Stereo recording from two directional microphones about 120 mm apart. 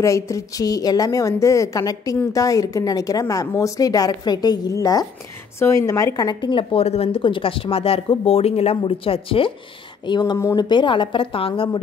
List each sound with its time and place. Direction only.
0.0 s a woman's voice: 25° left (ahead or behind); by 9.5 s 50° left (ahead or behind)
10.0 s a woman's voice: 35° left (ahead or behind)